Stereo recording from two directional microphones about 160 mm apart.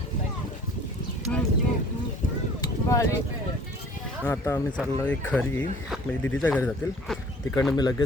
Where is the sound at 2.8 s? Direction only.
20° left (ahead or behind).